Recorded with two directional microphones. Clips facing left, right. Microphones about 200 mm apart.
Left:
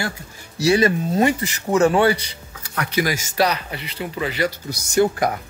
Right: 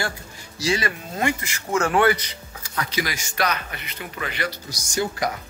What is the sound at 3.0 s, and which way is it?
Speech, 35° left (ahead or behind).